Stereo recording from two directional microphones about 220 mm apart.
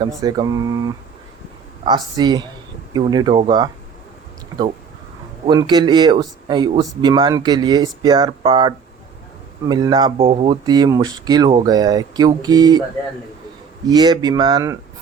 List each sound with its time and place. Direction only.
0.2 s speech: 15° right (ahead or behind)
5.5 s speech: 20° right (ahead or behind)
13.8 s speech: 20° right (ahead or behind)